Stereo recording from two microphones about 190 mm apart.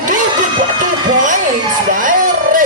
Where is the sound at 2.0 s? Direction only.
45° right (ahead or behind).